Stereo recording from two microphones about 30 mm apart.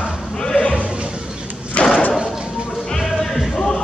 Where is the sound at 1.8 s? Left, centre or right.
Left.